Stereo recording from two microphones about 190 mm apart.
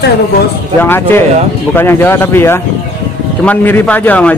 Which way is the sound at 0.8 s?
10° left (ahead or behind).